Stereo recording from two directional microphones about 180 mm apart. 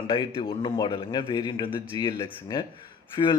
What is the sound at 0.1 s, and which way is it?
Speech, 30° left (ahead or behind).